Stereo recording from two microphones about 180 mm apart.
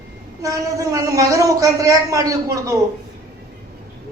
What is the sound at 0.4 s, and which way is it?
A man's voice, 20° right (ahead or behind).